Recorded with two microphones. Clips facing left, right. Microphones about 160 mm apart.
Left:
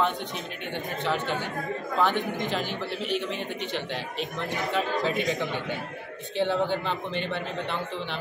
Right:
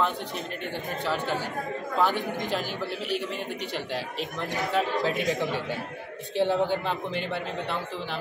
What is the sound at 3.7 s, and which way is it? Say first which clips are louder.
A man's voice: even; 5° right (ahead or behind).